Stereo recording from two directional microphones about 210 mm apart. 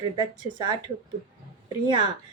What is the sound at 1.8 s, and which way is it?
Speech, 20° right (ahead or behind).